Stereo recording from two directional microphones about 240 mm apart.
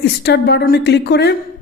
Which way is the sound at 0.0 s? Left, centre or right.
Left.